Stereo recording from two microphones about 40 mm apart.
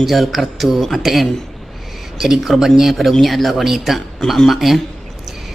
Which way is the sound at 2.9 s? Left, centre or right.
Centre.